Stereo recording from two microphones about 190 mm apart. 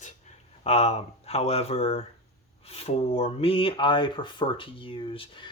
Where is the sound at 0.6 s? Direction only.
35° left (ahead or behind).